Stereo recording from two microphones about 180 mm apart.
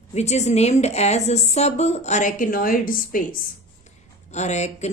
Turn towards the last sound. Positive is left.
turn(degrees=40)  # may be behind; listen again after turning